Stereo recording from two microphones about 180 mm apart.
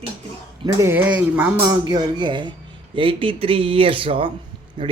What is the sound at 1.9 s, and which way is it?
Speech, 25° right (ahead or behind).